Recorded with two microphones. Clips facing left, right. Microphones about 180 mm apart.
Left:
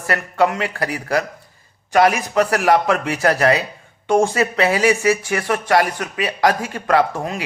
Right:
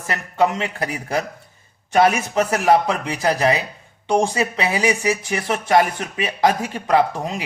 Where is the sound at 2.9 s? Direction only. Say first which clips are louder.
Left 3 dB; 20° right (ahead or behind).